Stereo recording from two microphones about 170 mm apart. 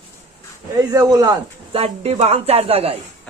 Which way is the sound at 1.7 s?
35° right (ahead or behind).